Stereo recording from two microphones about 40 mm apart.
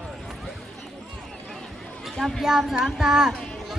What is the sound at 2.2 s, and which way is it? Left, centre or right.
Speech, centre.